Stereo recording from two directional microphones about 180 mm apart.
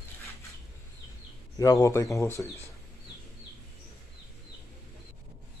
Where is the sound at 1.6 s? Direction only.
20° left (ahead or behind).